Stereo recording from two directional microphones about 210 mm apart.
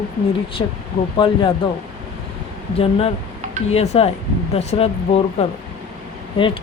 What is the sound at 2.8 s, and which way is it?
Speech, 25° left (ahead or behind).